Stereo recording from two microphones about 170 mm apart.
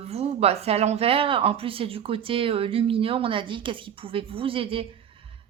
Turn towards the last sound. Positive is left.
turn(degrees=-35)  # may be behind; listen again after turning